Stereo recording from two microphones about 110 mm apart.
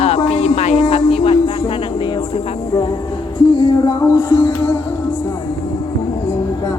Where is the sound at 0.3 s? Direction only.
85° left; by 1.4 s 60° left (ahead or behind).